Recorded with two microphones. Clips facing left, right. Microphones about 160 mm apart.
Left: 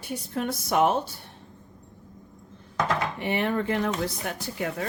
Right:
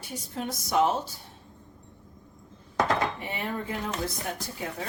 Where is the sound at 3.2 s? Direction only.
70° left (ahead or behind).